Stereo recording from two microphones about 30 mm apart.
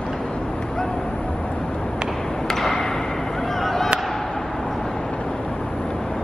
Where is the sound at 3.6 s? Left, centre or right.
Centre.